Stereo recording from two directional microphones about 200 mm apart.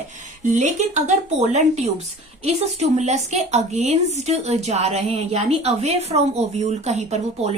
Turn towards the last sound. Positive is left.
turn(degrees=-35)  # may be behind; listen again after turning